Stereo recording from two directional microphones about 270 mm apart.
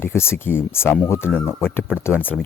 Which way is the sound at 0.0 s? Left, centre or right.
Centre.